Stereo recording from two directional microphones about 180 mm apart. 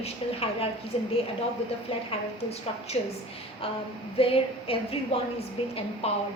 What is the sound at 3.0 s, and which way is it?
Speech, 35° left (ahead or behind).